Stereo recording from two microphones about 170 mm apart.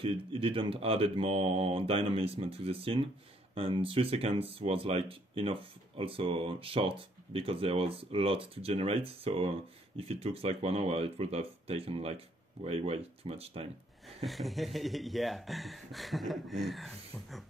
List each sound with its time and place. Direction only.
0.0 s speech: 30° right (ahead or behind)
14.0 s speech: centre (ahead or behind)